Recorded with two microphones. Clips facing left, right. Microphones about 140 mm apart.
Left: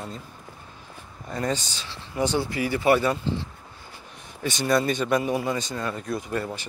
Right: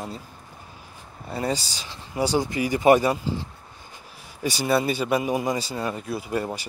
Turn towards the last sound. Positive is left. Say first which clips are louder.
# right 1 dB
turn(degrees=-10)  # may be behind; listen again after turning